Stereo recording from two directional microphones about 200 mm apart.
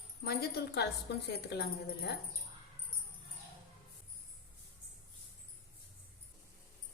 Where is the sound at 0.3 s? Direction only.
50° left (ahead or behind).